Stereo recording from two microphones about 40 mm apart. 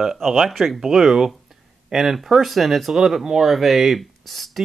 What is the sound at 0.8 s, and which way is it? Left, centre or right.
Speech, centre.